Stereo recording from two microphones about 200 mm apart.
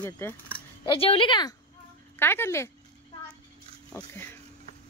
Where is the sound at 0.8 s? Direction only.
30° left (ahead or behind).